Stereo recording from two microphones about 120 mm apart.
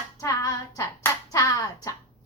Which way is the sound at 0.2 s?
25° left (ahead or behind).